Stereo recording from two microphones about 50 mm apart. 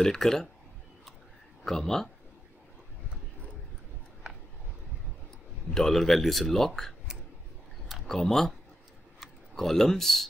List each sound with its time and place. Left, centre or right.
0.0 s speech: centre
1.6 s speech: centre
5.7 s speech: centre
9.6 s speech: centre